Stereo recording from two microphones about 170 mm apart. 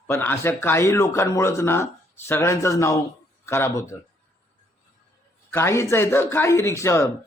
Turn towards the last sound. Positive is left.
turn(degrees=15)  # may be behind; listen again after turning